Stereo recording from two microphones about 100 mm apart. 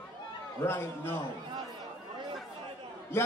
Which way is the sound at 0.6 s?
25° left (ahead or behind).